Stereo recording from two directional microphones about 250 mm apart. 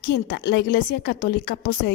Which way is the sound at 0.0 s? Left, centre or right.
Left.